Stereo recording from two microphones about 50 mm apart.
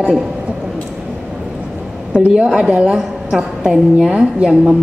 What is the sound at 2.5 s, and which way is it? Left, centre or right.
A woman's voice, centre.